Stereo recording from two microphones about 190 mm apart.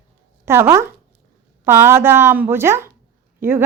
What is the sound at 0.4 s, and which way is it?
Speech, 15° right (ahead or behind).